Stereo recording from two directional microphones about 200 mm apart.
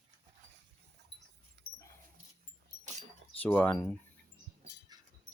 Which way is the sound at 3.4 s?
10° left (ahead or behind).